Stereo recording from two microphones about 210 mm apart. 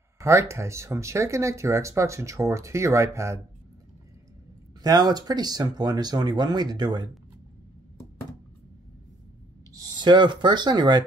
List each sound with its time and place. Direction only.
0.2 s speech: 15° right (ahead or behind)
4.8 s speech: 20° right (ahead or behind)
9.8 s speech: 20° right (ahead or behind)